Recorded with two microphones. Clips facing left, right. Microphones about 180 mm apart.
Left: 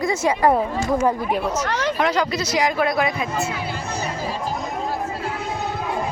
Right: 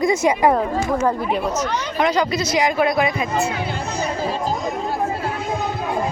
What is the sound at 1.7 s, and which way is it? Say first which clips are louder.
Speech: left 2 dB; 90° left.